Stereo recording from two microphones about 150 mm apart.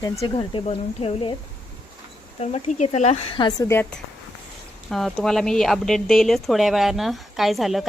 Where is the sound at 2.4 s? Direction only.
45° left (ahead or behind).